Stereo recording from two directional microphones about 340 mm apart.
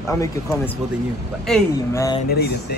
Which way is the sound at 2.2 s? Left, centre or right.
Left.